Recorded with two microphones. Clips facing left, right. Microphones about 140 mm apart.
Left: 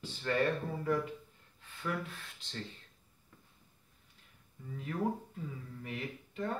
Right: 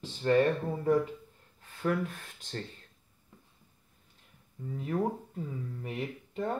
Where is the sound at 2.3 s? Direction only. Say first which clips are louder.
Right 2 dB; 50° right (ahead or behind).